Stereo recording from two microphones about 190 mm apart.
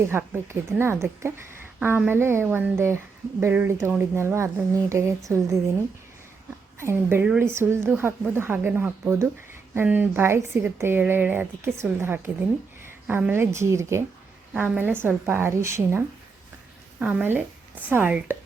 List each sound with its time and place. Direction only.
0.0 s a woman's voice: 15° right (ahead or behind)
6.7 s a woman's voice: 15° right (ahead or behind)